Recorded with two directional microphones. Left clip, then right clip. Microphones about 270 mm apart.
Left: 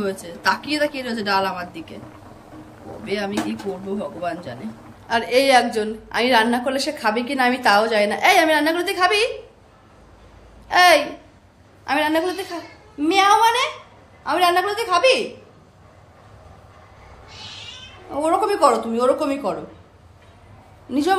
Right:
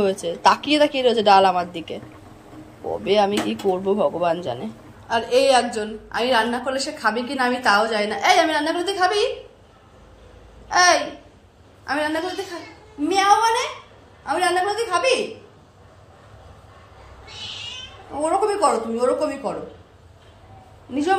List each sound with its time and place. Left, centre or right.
0.0 s a woman's voice: centre
3.1 s a woman's voice: centre
5.1 s a woman's voice: centre
8.1 s a woman's voice: left
8.6 s a woman's voice: centre
10.7 s babbling: centre
11.9 s a woman's voice: centre
18.2 s a woman's voice: centre
20.9 s a woman's voice: centre